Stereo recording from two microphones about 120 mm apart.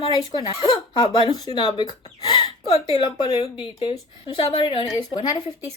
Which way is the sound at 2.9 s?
35° left (ahead or behind).